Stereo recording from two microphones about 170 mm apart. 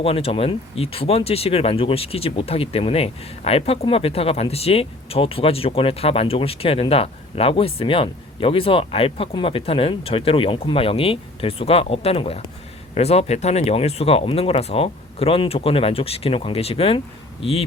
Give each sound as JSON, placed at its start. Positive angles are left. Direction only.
{"t": 0.0, "sound": "speech", "side_deg": 35}